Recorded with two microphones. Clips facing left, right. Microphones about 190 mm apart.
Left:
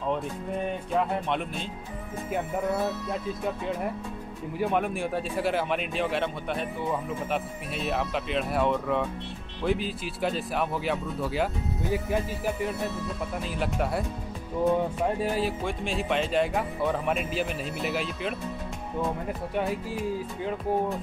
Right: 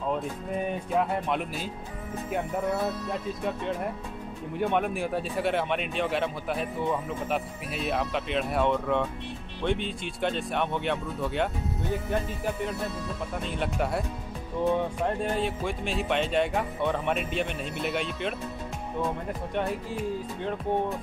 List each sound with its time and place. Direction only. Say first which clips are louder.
0.9 s speech: even; centre (ahead or behind)
4.6 s speech: even; centre (ahead or behind)